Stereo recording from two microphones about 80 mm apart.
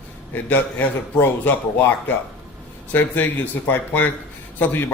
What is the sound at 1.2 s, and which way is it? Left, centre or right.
Speech, left.